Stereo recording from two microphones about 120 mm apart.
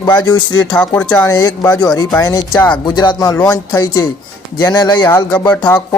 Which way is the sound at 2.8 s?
40° left (ahead or behind).